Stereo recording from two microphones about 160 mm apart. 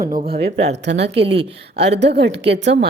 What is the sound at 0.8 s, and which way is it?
A woman's voice, 90° right.